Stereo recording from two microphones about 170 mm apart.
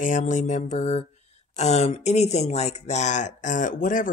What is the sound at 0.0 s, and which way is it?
Speech, 45° left (ahead or behind).